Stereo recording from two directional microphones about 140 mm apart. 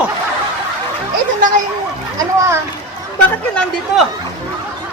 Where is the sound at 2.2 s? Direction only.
20° right (ahead or behind).